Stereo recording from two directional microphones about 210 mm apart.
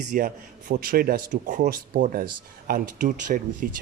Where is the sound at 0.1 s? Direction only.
40° right (ahead or behind).